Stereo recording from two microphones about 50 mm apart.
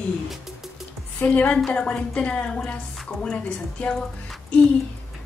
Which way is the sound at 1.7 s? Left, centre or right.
Left.